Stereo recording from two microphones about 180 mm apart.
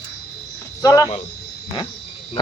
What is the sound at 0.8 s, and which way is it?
Speech, 20° left (ahead or behind).